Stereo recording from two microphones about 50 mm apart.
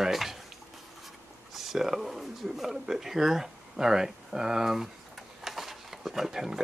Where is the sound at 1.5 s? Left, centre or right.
Centre.